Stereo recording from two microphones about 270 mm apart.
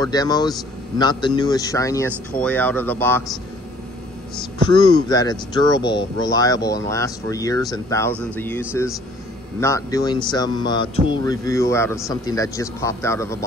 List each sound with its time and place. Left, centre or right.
0.0 s speech: centre
4.6 s speech: centre